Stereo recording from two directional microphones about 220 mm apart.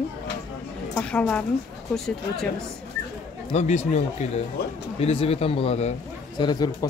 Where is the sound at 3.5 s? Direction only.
30° left (ahead or behind).